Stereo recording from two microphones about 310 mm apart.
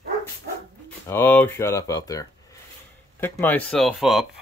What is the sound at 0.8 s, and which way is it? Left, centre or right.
Speech, centre.